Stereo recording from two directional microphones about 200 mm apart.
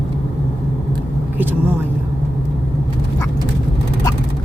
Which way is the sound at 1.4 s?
10° right (ahead or behind).